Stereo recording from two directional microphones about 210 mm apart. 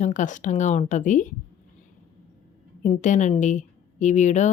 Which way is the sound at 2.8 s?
35° left (ahead or behind).